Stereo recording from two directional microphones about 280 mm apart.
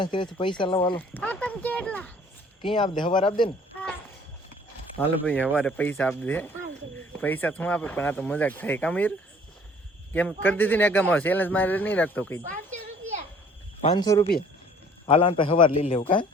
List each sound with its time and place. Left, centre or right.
0.0 s speech: centre
0.9 s speech: centre
2.7 s speech: centre
4.9 s speech: centre
13.8 s a man's voice: centre